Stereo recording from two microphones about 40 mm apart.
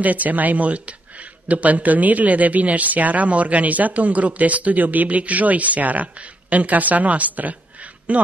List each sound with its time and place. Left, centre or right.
0.0 s speech: right